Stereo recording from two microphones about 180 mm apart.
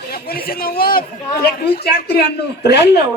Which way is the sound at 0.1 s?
55° left (ahead or behind).